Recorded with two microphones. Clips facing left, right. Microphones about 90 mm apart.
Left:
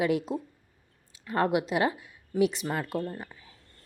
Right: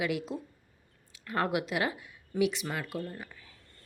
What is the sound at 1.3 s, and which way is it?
Speech, 25° left (ahead or behind).